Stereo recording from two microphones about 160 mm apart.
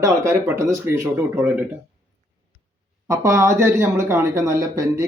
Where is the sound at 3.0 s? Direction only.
20° right (ahead or behind).